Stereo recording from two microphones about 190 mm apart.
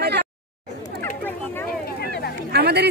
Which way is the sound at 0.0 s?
60° right (ahead or behind).